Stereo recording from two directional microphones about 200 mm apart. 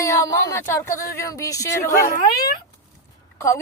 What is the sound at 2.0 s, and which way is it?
Speech, 45° left (ahead or behind).